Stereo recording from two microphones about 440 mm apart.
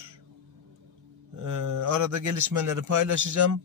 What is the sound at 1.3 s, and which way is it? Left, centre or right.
Speech, right.